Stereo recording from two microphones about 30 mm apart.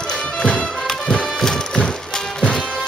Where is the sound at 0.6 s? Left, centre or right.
Centre.